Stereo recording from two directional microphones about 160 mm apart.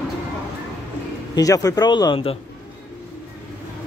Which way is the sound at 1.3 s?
20° left (ahead or behind).